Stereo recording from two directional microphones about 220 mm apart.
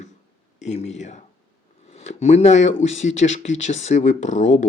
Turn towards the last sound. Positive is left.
turn(degrees=35)  # may be behind; listen again after turning